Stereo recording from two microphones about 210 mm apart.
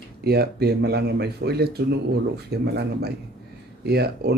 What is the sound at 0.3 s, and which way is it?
Speech, 50° right (ahead or behind).